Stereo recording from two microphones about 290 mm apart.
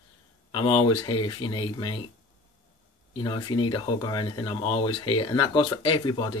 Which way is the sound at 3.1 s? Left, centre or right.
Centre.